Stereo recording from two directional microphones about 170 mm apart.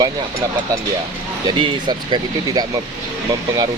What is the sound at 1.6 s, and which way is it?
Speech, 30° right (ahead or behind).